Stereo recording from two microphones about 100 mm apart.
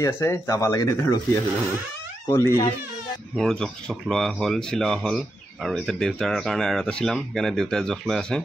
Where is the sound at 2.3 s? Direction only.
25° left (ahead or behind).